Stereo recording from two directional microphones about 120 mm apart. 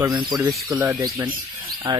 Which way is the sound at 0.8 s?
20° right (ahead or behind).